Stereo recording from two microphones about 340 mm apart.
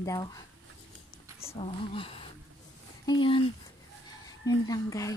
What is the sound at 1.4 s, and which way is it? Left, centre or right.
Speech, centre.